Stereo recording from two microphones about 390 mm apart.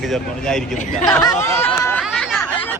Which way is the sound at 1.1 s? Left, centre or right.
Centre.